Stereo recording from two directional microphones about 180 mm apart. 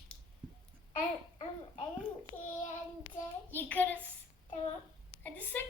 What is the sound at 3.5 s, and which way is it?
Child singing, 10° left (ahead or behind).